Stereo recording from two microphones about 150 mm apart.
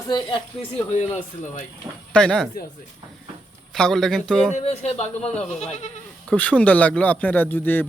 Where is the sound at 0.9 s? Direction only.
50° left (ahead or behind).